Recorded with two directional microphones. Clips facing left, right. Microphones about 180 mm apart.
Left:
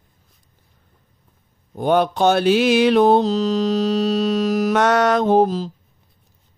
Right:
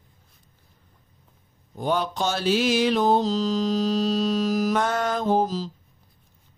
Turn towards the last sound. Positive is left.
turn(degrees=60)  # may be behind; listen again after turning